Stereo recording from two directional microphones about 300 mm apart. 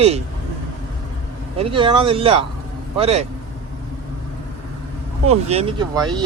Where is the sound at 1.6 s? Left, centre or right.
Centre.